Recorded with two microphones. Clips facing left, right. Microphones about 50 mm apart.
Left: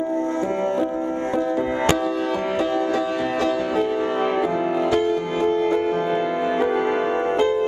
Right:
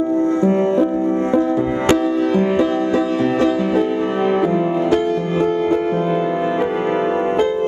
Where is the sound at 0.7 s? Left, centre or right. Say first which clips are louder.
Right 6 dB; centre.